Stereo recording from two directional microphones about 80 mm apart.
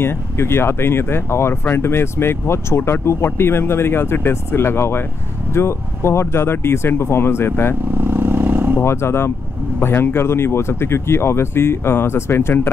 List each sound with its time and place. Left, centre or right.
0.0 s speech: left
8.0 s vehicle: right
8.8 s speech: left